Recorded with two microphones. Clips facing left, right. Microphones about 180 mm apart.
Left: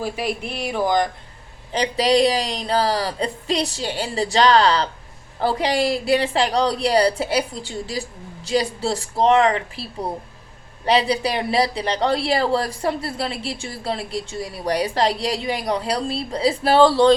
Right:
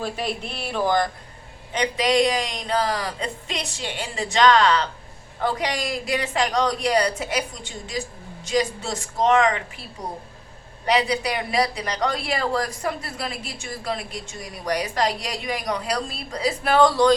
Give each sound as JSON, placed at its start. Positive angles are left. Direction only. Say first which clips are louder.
{"t": 0.0, "sound": "speech", "louder": "left 3 dB", "side_deg": 10}
{"t": 1.7, "sound": "a man's voice", "louder": "left 3 dB", "side_deg": 35}
{"t": 10.8, "sound": "speech", "louder": "left 3 dB", "side_deg": 30}